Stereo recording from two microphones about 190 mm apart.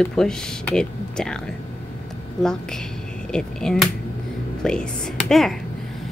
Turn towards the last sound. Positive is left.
turn(degrees=0)  # may be behind; listen again after turning